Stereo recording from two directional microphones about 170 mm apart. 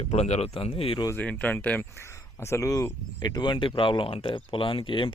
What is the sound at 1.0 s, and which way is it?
Speech, 10° left (ahead or behind).